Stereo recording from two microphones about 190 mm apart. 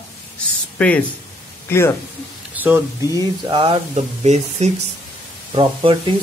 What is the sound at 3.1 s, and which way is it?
Speech, 25° right (ahead or behind).